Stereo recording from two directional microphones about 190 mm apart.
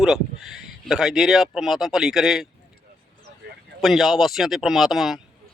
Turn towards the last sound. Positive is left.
turn(degrees=0)  # may be behind; listen again after turning